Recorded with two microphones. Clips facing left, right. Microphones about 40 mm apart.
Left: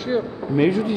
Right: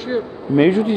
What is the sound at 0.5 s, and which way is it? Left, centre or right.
Speech, right.